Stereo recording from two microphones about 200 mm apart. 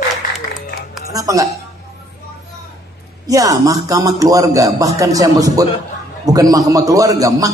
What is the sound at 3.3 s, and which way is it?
A man's voice, 15° right (ahead or behind).